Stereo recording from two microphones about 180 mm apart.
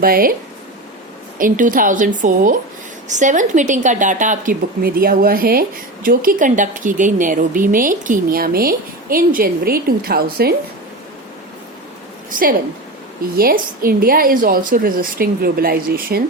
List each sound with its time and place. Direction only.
0.0 s speech: 55° right (ahead or behind)
1.4 s speech: 50° right (ahead or behind)
12.3 s speech: 50° right (ahead or behind)